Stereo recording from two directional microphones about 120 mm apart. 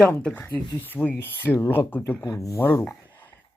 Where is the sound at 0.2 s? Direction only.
10° left (ahead or behind).